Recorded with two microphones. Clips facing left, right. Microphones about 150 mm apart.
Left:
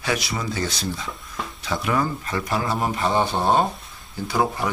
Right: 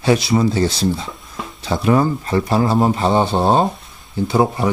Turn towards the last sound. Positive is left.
turn(degrees=-25)  # may be behind; listen again after turning